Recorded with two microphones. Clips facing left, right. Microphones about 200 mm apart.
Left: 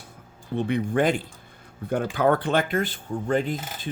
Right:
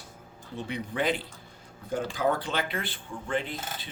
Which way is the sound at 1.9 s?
60° left (ahead or behind).